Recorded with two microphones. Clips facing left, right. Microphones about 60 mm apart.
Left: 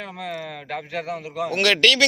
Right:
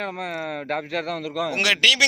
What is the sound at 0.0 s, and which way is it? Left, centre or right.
A man's voice, right.